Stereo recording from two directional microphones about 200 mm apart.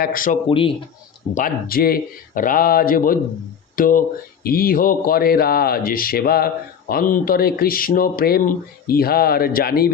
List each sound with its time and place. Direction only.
0.0 s speech: 45° left (ahead or behind)
0.4 s speech: 25° left (ahead or behind)
1.3 s speech: 40° left (ahead or behind)